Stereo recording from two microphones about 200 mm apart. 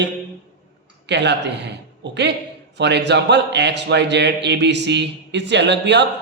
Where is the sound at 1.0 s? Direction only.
60° right (ahead or behind).